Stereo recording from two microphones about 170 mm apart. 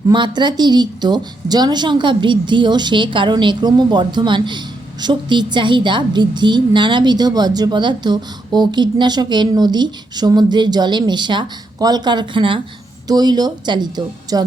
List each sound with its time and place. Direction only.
0.1 s a woman's voice: 25° right (ahead or behind)